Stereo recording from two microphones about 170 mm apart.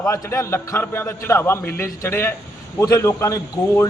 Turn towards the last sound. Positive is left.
turn(degrees=15)  # may be behind; listen again after turning